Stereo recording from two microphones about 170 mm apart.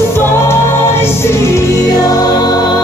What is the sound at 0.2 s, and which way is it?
Music, 15° left (ahead or behind).